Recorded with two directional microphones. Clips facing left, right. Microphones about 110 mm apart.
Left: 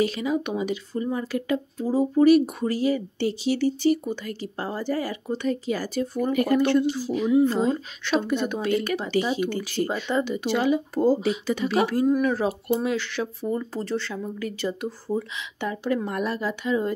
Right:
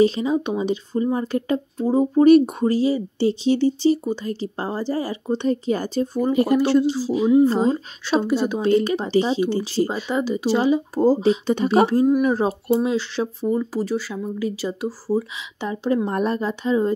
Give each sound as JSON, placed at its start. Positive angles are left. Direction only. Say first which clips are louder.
{"t": 0.0, "sound": "speech", "louder": "right 6 dB", "side_deg": -25}
{"t": 12.1, "sound": "speech", "louder": "right 4 dB", "side_deg": -20}
{"t": 16.1, "sound": "speech", "louder": "right 5 dB", "side_deg": -35}